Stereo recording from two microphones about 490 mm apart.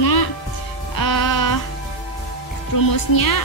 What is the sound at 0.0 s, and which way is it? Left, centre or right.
Music, left.